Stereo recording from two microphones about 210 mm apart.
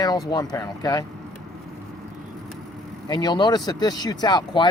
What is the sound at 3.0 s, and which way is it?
Speech, 20° left (ahead or behind).